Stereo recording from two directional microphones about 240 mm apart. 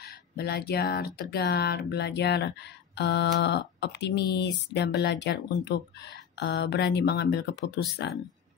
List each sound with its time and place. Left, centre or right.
0.0 s speech: left